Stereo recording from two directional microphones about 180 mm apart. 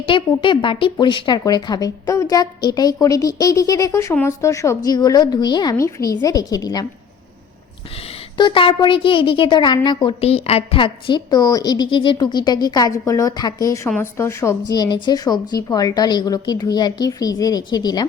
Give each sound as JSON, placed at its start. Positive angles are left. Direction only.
{"t": 0.1, "sound": "a woman's voice", "side_deg": 25}
{"t": 8.4, "sound": "a woman's voice", "side_deg": 25}